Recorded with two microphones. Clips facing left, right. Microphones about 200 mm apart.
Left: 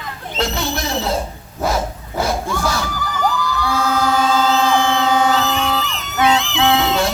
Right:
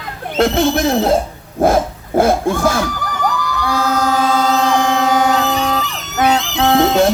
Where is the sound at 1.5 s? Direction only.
50° right (ahead or behind).